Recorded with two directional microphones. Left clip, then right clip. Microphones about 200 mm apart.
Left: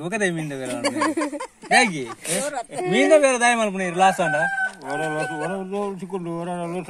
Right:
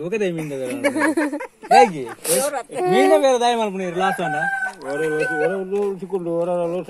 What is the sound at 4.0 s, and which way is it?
Speech, 35° left (ahead or behind).